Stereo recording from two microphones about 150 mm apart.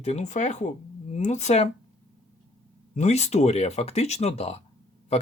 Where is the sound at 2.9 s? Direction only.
50° left (ahead or behind).